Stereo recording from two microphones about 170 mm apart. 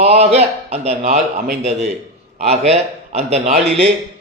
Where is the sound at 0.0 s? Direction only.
40° right (ahead or behind).